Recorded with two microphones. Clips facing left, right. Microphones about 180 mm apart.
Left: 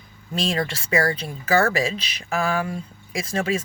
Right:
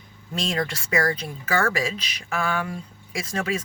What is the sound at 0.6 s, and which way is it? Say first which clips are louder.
Speech: even; 30° left (ahead or behind).